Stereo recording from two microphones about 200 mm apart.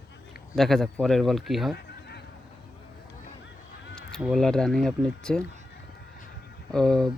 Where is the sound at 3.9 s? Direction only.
Centre (ahead or behind).